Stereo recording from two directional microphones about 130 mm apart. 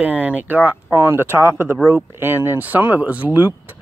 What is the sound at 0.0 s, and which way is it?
Speech, 10° right (ahead or behind).